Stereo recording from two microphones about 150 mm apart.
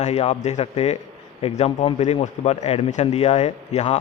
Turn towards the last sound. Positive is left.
turn(degrees=45)  # may be behind; listen again after turning